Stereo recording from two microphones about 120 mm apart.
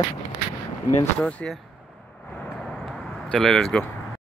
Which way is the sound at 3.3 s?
5° left (ahead or behind).